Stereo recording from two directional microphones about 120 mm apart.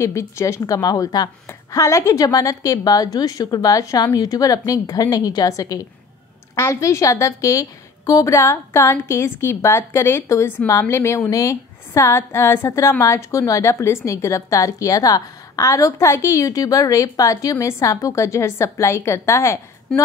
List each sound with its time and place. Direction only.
0.0 s a woman's voice: 25° left (ahead or behind)